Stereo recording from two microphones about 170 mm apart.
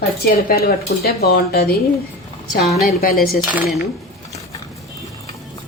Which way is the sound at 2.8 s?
60° left (ahead or behind).